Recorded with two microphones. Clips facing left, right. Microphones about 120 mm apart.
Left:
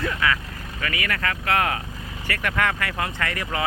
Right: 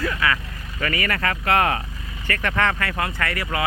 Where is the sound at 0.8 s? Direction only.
Centre (ahead or behind).